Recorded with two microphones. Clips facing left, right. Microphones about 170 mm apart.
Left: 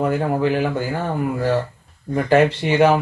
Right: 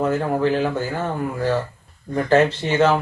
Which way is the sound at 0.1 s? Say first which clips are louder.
Even; 15° left (ahead or behind).